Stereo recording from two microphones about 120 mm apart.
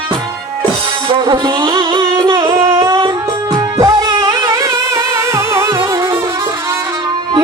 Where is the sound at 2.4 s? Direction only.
25° right (ahead or behind).